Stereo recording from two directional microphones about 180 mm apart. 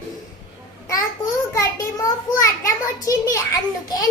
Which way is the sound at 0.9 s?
20° left (ahead or behind).